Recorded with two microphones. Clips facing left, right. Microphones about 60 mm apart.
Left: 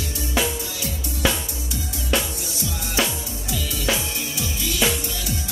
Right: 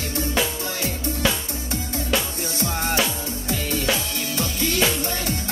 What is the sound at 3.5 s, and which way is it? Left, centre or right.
Music, right.